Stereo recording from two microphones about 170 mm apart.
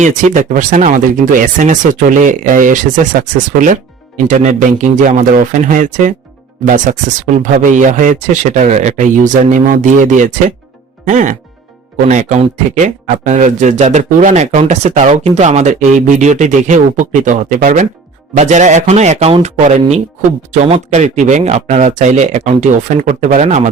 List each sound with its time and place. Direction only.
0.0 s speech: 50° right (ahead or behind)
18.3 s speech: 45° right (ahead or behind)